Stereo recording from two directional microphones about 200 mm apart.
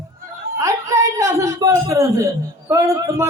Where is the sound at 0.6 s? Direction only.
15° right (ahead or behind).